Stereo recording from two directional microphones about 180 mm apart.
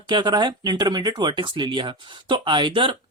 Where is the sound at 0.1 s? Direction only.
25° right (ahead or behind).